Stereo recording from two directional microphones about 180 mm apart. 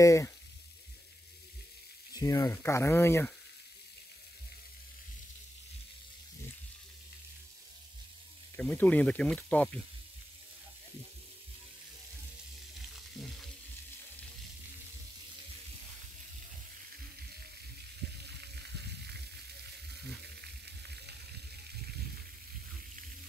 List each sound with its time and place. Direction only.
0.0 s speech: 15° left (ahead or behind)
2.1 s speech: 20° left (ahead or behind)
8.5 s speech: 10° left (ahead or behind)
18.2 s frying: 65° right (ahead or behind)
20.4 s frying: 65° right (ahead or behind)